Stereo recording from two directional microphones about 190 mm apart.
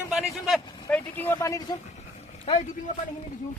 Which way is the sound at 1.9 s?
35° left (ahead or behind).